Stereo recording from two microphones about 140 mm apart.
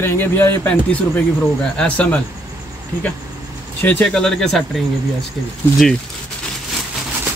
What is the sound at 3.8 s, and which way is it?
Speech, 15° left (ahead or behind).